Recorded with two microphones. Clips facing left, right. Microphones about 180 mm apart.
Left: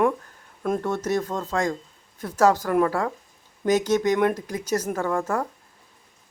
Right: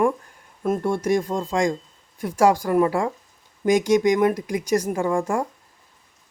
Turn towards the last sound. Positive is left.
turn(degrees=-10)  # may be behind; listen again after turning